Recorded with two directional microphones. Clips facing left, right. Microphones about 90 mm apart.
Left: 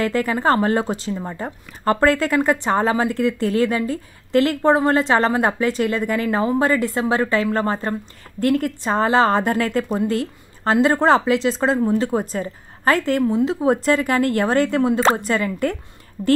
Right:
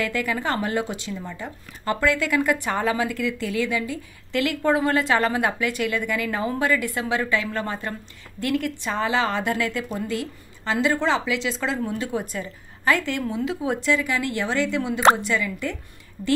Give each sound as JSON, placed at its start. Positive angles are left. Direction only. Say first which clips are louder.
{"t": 0.0, "sound": "a woman's voice", "louder": "left 6 dB", "side_deg": 35}